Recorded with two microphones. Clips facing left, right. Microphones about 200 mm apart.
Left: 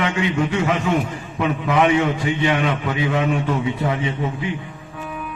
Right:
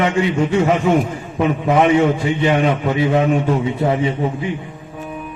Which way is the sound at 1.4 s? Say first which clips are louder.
Right 3 dB; 35° right (ahead or behind).